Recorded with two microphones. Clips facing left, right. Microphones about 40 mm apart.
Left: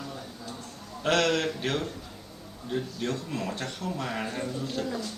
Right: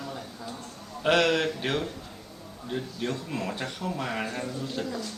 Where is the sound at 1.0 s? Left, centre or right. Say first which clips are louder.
Right 2 dB; centre.